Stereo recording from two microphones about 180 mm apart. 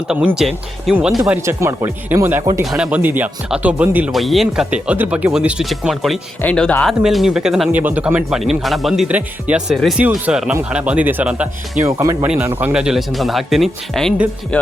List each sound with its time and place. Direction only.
0.3 s speech: centre (ahead or behind)
1.3 s speech: 15° right (ahead or behind)
2.4 s speech: 25° right (ahead or behind)
2.6 s speech: 5° right (ahead or behind)